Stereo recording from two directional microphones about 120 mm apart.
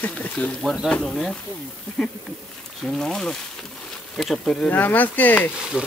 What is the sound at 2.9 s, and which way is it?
Speech, 5° left (ahead or behind).